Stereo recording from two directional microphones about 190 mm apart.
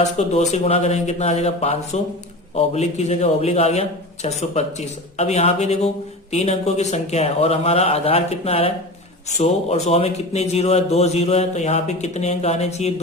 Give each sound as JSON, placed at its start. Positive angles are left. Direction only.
{"t": 0.0, "sound": "a man's voice", "side_deg": 35}